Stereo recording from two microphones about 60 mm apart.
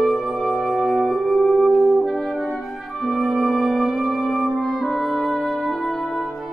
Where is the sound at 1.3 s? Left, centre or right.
Centre.